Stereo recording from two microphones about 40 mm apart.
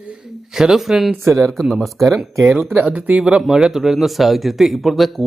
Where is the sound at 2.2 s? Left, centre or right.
Right.